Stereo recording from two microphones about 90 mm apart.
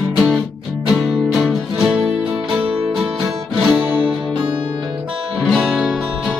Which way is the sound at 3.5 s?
15° right (ahead or behind).